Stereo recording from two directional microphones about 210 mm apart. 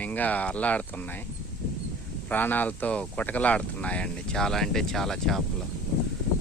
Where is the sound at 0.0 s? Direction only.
5° left (ahead or behind).